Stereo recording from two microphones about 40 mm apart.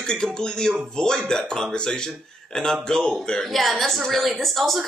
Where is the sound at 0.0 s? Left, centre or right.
Centre.